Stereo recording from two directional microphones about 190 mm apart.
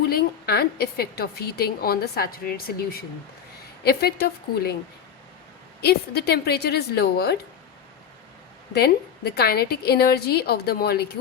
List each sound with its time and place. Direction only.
0.1 s a woman's voice: 55° left (ahead or behind)
5.8 s a woman's voice: 60° left (ahead or behind)
8.7 s a woman's voice: 60° left (ahead or behind)